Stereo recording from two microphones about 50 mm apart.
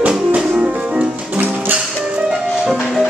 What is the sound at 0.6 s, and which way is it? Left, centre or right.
Music, right.